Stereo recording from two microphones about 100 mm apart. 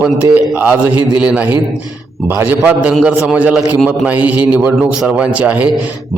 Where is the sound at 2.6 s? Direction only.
15° right (ahead or behind).